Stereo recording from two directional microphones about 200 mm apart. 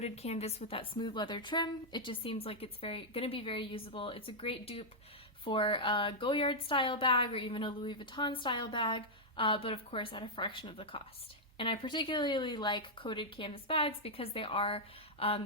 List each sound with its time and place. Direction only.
0.0 s speech: 30° left (ahead or behind)